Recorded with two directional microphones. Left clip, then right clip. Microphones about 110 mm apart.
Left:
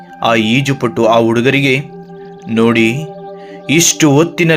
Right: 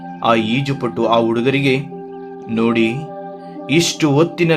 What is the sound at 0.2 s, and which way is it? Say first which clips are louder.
Speech: left 4 dB; 35° left (ahead or behind).